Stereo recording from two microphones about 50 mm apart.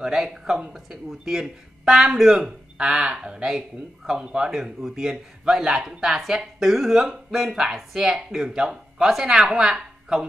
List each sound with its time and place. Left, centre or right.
0.0 s speech: centre